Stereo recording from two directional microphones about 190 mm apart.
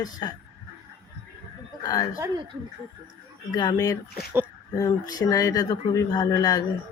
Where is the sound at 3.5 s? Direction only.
20° left (ahead or behind).